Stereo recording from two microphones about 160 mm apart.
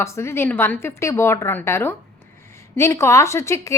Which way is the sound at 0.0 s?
15° left (ahead or behind).